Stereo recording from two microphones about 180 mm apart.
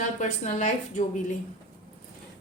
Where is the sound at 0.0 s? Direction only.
40° left (ahead or behind).